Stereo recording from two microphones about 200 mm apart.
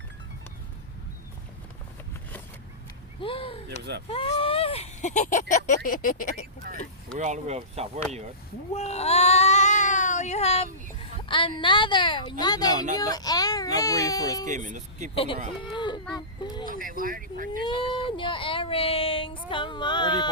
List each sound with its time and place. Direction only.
3.2 s a woman's voice: 25° left (ahead or behind); by 6.3 s 45° left (ahead or behind)
6.7 s vehicle: 50° right (ahead or behind)
7.2 s speech: 35° right (ahead or behind)
8.7 s a sound: 35° left (ahead or behind)
11.3 s a woman's voice: 25° left (ahead or behind)
14.4 s speech: 40° right (ahead or behind)
15.1 s a woman's voice: 30° left (ahead or behind)
16.4 s a sound: 20° left (ahead or behind)
16.6 s vehicle: 45° right (ahead or behind)
17.6 s a sound: 25° left (ahead or behind)
19.5 s a woman's voice: 25° left (ahead or behind)